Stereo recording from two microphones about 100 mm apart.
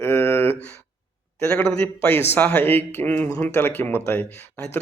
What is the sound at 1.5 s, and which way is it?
Speech, 15° left (ahead or behind).